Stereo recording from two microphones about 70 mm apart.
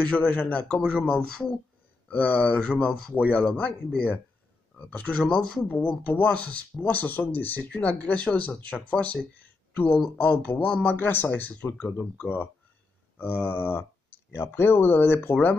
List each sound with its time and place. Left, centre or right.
0.0 s a man's voice: centre
5.8 s a man's voice: left
13.2 s speech: left